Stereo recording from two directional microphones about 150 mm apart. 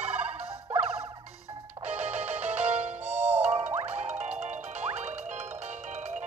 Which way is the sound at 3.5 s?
40° right (ahead or behind).